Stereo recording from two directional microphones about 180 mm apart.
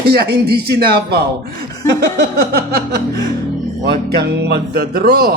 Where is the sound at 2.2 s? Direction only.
60° right (ahead or behind).